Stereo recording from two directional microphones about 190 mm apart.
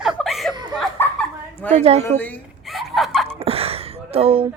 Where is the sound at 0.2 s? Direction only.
Centre (ahead or behind).